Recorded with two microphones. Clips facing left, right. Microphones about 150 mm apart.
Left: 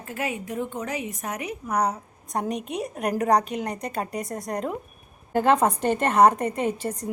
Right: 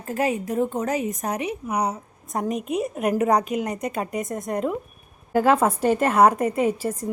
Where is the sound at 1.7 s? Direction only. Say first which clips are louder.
Left 3 dB; 10° right (ahead or behind).